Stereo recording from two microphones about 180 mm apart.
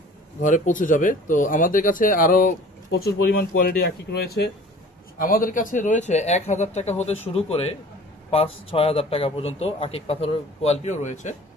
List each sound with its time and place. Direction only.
0.4 s speech: 45° left (ahead or behind)
5.1 s a man's voice: 50° left (ahead or behind)